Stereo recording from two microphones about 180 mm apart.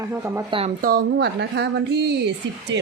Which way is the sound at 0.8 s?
60° right (ahead or behind).